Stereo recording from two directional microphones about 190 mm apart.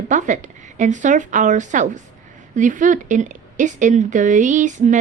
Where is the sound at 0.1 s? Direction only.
40° right (ahead or behind).